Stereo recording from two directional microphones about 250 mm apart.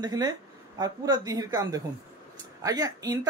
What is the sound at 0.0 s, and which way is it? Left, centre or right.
Speech, centre.